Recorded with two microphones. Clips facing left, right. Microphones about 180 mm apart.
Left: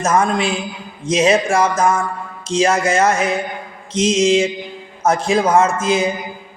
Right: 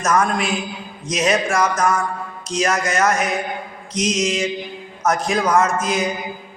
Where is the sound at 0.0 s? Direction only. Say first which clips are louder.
Left 2 dB; 25° left (ahead or behind).